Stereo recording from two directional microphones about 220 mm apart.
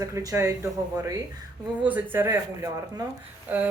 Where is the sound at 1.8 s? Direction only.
10° right (ahead or behind).